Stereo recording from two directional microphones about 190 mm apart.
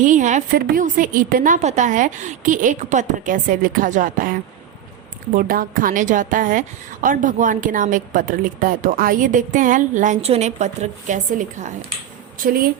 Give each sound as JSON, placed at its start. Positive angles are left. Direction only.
{"t": 0.0, "sound": "a woman's voice", "side_deg": -40}